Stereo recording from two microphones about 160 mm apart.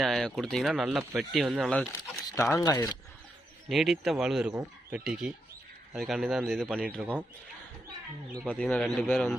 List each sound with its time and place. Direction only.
0.0 s speech: centre (ahead or behind)
1.9 s a sound: 20° left (ahead or behind)
2.6 s speech: 20° left (ahead or behind)
3.7 s speech: centre (ahead or behind)
8.4 s speech: 5° left (ahead or behind)